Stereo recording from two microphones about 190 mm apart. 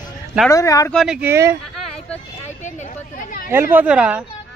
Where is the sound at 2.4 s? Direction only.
40° left (ahead or behind).